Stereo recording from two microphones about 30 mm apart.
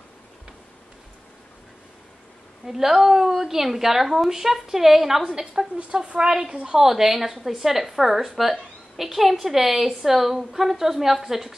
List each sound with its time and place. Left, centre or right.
2.7 s speech: centre
5.2 s a woman's voice: right
6.2 s speech: centre
6.5 s a woman's voice: right
6.8 s speech: centre